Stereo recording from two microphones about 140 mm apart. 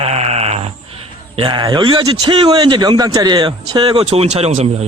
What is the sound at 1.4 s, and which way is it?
A man's voice, 35° right (ahead or behind).